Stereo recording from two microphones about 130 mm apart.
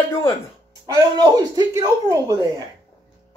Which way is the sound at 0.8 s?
30° right (ahead or behind).